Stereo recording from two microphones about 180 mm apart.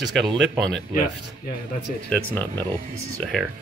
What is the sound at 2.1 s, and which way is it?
Speech, 10° left (ahead or behind).